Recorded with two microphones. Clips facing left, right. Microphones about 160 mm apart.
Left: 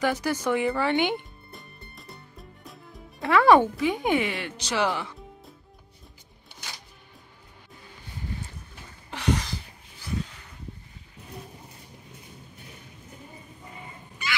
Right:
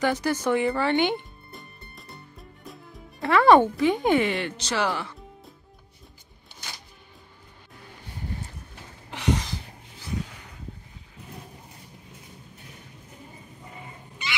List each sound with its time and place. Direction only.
0.0 s speech: 5° left (ahead or behind)
0.4 s music: 5° left (ahead or behind)
9.1 s a sound: 20° right (ahead or behind)